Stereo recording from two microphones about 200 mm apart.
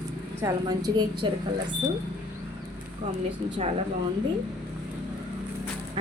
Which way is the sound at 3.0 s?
35° right (ahead or behind).